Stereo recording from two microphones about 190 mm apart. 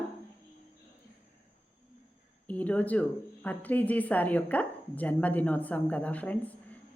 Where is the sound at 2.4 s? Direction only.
10° left (ahead or behind).